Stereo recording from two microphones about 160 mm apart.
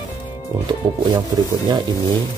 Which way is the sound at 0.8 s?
25° right (ahead or behind).